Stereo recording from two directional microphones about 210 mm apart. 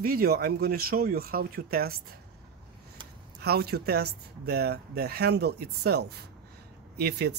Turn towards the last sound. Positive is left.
turn(degrees=-50)  # may be behind; listen again after turning